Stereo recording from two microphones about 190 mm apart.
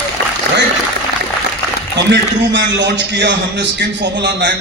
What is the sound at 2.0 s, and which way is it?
A man's voice, 65° right (ahead or behind).